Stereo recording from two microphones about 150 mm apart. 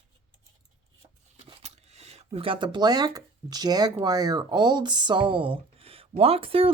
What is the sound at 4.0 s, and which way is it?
Speech, 25° right (ahead or behind).